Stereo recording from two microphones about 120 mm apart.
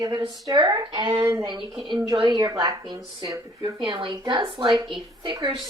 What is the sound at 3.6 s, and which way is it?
Speech, 40° right (ahead or behind).